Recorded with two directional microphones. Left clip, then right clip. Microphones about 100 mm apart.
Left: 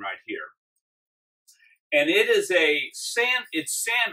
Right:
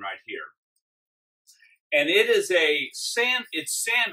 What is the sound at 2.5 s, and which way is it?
Speech, 20° left (ahead or behind).